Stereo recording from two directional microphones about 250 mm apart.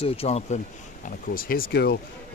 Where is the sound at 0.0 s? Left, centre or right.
Left.